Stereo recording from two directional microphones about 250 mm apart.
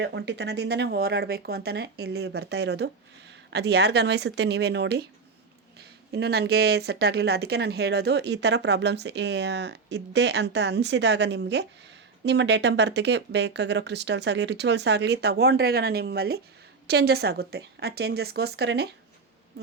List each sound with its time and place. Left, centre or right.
0.0 s speech: right